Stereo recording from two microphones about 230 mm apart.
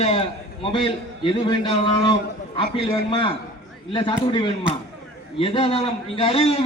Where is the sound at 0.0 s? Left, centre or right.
Left.